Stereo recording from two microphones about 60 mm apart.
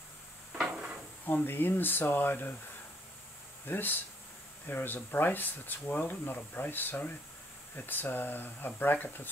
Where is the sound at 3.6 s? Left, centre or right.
Left.